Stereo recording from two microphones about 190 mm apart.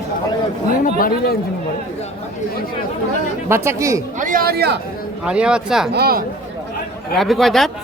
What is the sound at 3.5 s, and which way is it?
Speech, 15° right (ahead or behind).